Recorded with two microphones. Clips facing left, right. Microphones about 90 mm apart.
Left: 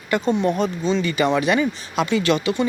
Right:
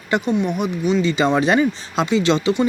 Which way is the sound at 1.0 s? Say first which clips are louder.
Right 1 dB; 25° right (ahead or behind).